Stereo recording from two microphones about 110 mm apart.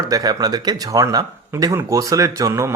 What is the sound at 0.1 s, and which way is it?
Speech, 35° right (ahead or behind).